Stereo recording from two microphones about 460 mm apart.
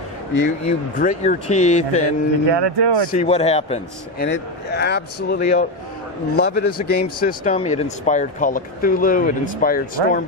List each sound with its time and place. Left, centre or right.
0.3 s speech: left
0.9 s speech: centre
2.5 s speech: right
3.1 s a man's voice: centre